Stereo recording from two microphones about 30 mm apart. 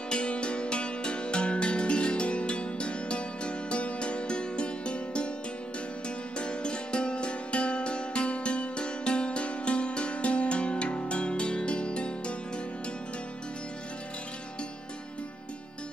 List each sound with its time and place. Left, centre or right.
0.1 s music: left